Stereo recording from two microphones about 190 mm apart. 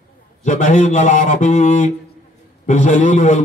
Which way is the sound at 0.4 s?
40° left (ahead or behind).